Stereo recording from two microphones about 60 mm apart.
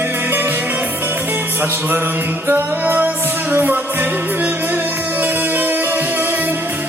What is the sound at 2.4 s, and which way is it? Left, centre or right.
Music, right.